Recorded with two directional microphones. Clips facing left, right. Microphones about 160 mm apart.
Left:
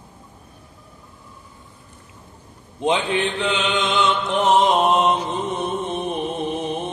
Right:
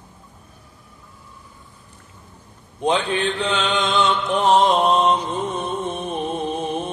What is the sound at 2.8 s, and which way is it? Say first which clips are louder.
Mantra: even; 20° left (ahead or behind).